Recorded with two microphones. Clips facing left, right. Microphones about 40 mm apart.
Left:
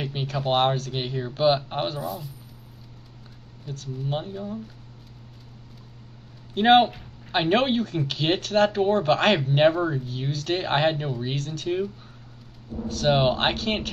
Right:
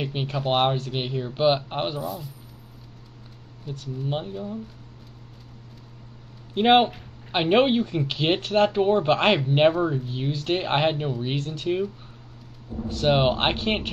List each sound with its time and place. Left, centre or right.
0.0 s speech: centre
2.0 s speech: centre
3.6 s speech: centre
6.5 s speech: centre
9.4 s speech: centre
10.3 s speech: centre
11.3 s speech: right
12.8 s a sound: right
13.1 s speech: centre